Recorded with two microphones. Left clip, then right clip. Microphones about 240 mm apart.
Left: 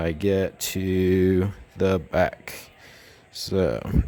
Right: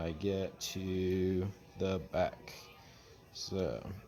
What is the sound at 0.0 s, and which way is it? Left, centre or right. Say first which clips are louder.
Speech: left 13 dB; left.